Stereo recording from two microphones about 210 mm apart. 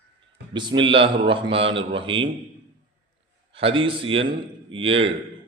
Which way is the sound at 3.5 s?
25° right (ahead or behind).